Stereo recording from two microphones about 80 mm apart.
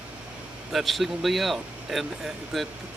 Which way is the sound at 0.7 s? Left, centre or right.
Centre.